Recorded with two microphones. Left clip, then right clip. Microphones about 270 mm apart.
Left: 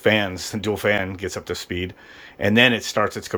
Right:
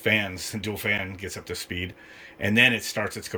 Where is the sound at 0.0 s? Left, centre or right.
Centre.